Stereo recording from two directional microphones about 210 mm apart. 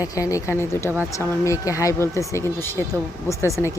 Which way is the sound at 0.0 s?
15° left (ahead or behind).